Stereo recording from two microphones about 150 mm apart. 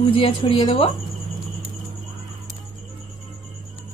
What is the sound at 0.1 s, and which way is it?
Speech, 35° left (ahead or behind).